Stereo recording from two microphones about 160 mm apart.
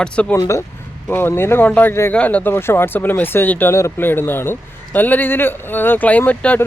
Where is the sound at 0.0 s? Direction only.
5° left (ahead or behind).